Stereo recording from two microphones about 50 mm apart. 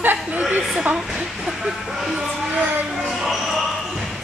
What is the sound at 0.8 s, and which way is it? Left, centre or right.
Speech, centre.